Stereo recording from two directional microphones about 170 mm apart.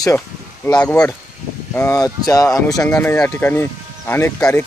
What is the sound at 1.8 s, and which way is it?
Speech, 20° left (ahead or behind).